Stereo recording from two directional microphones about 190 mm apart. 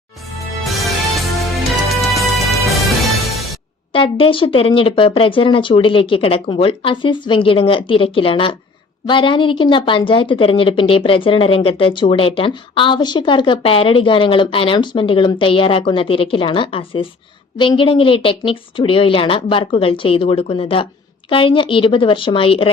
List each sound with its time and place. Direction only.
0.3 s music: centre (ahead or behind)
3.9 s speech: 25° left (ahead or behind)